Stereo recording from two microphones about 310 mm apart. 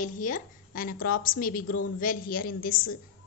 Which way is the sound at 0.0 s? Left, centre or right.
Left.